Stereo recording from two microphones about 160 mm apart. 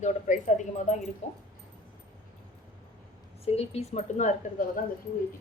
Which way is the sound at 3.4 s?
40° left (ahead or behind).